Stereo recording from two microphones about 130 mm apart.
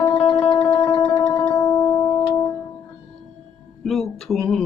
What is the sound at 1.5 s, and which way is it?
Music, 25° left (ahead or behind).